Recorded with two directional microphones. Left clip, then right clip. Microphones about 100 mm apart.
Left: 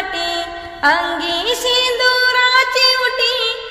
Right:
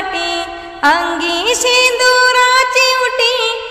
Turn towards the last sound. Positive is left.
turn(degrees=-55)  # may be behind; listen again after turning